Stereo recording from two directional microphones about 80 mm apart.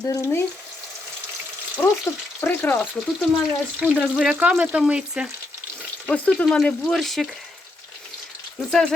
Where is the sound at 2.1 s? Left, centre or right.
Left.